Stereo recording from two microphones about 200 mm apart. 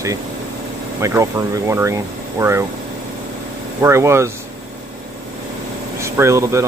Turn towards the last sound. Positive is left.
turn(degrees=-15)  # may be behind; listen again after turning